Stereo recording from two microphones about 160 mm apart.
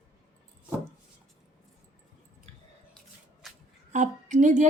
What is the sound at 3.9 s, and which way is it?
Speech, 50° right (ahead or behind).